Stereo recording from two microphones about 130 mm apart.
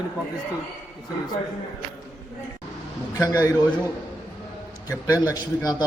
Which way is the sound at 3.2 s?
25° left (ahead or behind).